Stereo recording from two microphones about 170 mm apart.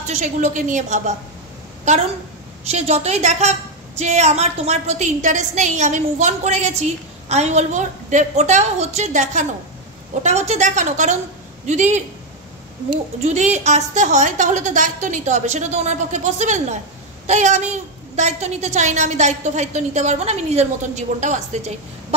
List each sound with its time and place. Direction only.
0.0 s a woman's voice: 45° right (ahead or behind)
2.6 s a woman's voice: 40° right (ahead or behind)
13.2 s a woman's voice: 40° right (ahead or behind)